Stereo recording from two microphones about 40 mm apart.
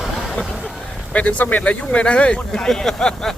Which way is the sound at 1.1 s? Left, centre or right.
Left.